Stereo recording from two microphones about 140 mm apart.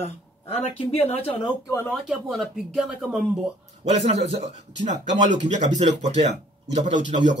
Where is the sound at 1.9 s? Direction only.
Centre (ahead or behind).